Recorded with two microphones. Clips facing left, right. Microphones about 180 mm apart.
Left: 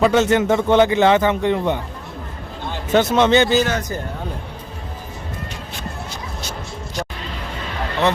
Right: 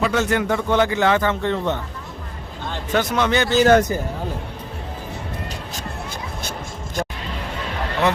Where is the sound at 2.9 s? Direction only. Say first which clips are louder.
Left 5 dB; 25° left (ahead or behind).